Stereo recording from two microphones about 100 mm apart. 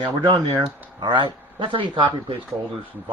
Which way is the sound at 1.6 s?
55° right (ahead or behind).